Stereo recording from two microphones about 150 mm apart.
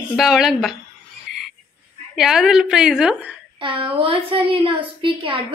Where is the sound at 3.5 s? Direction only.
35° right (ahead or behind).